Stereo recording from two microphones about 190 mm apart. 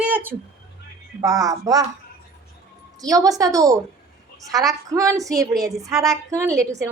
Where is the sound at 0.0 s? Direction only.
10° right (ahead or behind).